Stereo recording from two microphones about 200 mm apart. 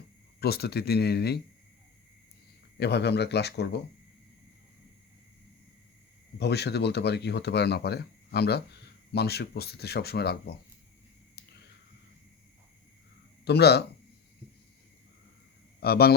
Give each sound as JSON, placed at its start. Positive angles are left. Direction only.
{"t": 0.3, "sound": "speech", "side_deg": 50}
{"t": 2.7, "sound": "speech", "side_deg": 55}
{"t": 6.4, "sound": "speech", "side_deg": 55}
{"t": 13.4, "sound": "speech", "side_deg": 55}
{"t": 15.8, "sound": "speech", "side_deg": 50}